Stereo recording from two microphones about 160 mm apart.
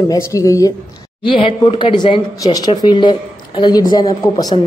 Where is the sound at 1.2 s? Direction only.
30° left (ahead or behind).